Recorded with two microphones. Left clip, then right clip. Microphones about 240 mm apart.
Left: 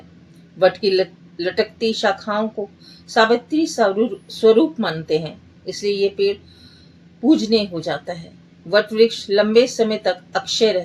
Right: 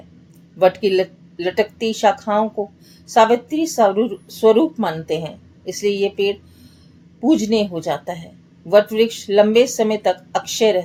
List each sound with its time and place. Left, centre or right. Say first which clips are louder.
0.6 s speech: right 1 dB; right